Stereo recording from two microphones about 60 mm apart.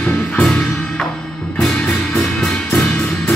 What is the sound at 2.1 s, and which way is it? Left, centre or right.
Music, centre.